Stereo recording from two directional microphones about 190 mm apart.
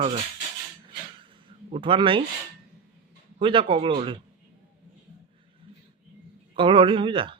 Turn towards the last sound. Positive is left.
turn(degrees=-25)  # may be behind; listen again after turning